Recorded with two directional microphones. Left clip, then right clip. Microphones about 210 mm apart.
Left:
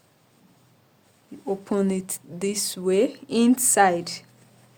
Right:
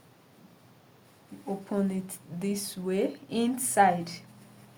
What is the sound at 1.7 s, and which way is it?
A woman's voice, 50° left (ahead or behind).